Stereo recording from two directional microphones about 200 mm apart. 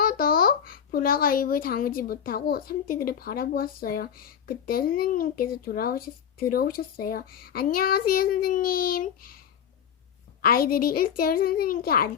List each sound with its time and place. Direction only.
0.0 s speech: 45° left (ahead or behind)
10.4 s speech: 45° left (ahead or behind)